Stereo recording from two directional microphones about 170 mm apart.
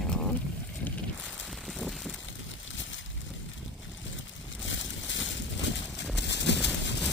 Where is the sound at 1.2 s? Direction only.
Centre (ahead or behind).